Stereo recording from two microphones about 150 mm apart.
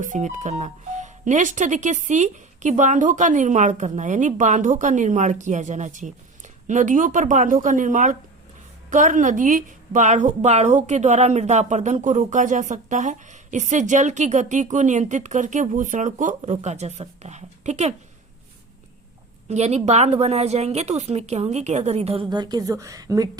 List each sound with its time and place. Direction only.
0.0 s a woman's voice: 55° right (ahead or behind)
19.5 s a woman's voice: 45° right (ahead or behind); by 23.4 s 25° right (ahead or behind)